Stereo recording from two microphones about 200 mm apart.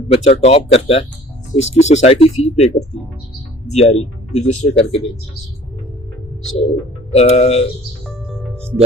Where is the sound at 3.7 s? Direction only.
35° left (ahead or behind).